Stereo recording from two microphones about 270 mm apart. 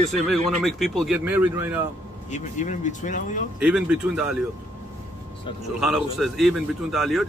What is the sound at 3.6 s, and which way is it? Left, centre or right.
Speech, centre.